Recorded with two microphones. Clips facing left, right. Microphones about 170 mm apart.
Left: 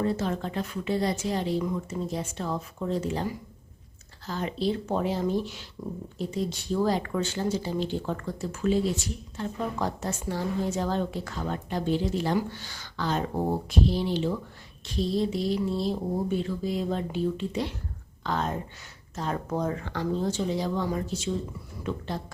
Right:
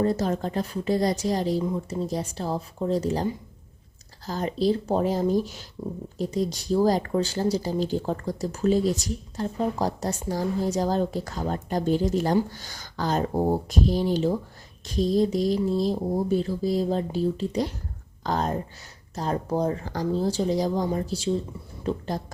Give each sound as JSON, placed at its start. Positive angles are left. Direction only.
{"t": 0.0, "sound": "speech", "side_deg": -40}
{"t": 4.3, "sound": "speech", "side_deg": -40}
{"t": 13.3, "sound": "speech", "side_deg": -15}
{"t": 13.7, "sound": "speech", "side_deg": -45}